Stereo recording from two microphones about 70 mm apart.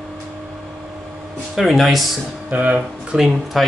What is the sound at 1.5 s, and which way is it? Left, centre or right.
Speech, centre.